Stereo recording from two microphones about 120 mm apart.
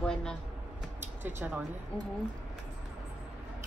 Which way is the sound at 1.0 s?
15° right (ahead or behind).